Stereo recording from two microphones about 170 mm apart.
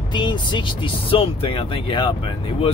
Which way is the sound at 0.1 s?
25° left (ahead or behind).